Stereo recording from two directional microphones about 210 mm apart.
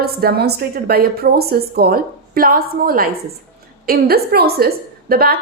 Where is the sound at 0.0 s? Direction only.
45° right (ahead or behind).